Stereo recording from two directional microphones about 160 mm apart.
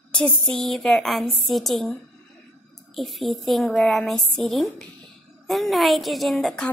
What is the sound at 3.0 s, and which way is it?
A woman's voice, centre (ahead or behind).